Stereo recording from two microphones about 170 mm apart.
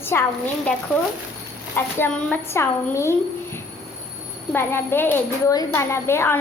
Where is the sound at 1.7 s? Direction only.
10° left (ahead or behind).